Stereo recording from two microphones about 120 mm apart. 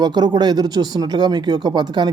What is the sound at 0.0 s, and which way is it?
Speech, 35° right (ahead or behind).